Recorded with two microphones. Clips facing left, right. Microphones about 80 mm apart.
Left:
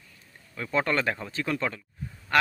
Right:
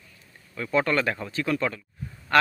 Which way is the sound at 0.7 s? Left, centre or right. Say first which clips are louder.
Right 2 dB; left.